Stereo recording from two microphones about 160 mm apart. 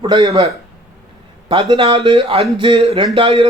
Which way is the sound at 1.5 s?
35° right (ahead or behind).